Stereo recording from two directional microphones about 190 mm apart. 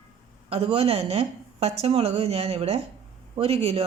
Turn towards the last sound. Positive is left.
turn(degrees=-30)  # may be behind; listen again after turning